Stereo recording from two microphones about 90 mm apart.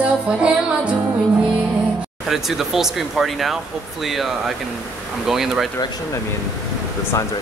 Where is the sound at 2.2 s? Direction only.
5° right (ahead or behind).